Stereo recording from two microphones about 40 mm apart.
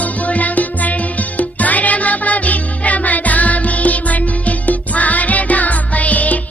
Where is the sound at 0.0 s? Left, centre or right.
Left.